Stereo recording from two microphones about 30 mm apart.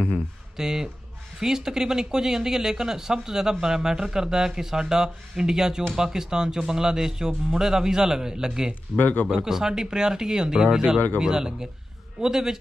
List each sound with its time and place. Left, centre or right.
0.6 s a man's voice: centre
8.9 s speech: left
9.4 s a man's voice: centre